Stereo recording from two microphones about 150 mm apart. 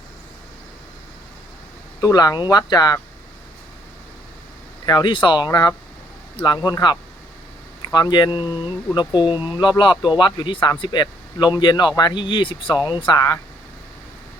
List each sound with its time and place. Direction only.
2.0 s speech: 25° left (ahead or behind)
4.9 s speech: 30° left (ahead or behind)